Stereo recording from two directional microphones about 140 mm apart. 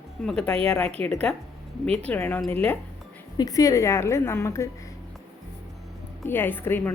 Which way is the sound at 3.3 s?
25° left (ahead or behind).